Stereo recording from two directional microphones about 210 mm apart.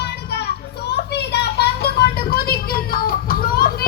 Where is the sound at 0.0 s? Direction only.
50° left (ahead or behind).